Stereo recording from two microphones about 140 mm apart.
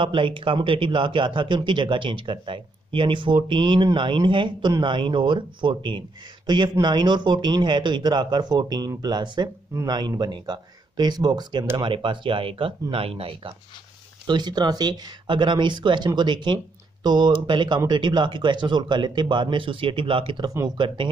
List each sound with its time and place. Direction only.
0.0 s a man's voice: 35° right (ahead or behind)
14.2 s a man's voice: 30° right (ahead or behind)